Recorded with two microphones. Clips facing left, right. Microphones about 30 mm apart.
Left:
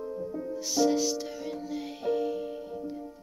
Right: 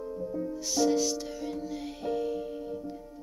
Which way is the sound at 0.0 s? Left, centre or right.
Centre.